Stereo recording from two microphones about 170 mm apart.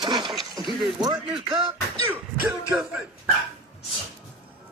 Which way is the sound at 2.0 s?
15° right (ahead or behind).